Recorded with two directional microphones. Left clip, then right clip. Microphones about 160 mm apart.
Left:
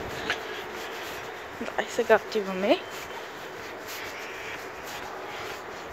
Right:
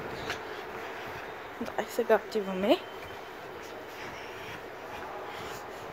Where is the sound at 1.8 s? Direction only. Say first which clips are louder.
Left 4 dB; 15° right (ahead or behind).